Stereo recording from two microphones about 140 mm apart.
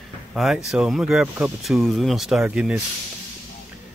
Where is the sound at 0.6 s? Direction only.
Centre (ahead or behind).